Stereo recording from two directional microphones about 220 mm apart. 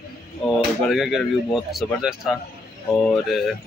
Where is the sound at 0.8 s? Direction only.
Centre (ahead or behind).